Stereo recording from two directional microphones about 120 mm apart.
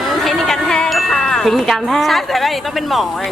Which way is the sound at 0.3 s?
Centre (ahead or behind).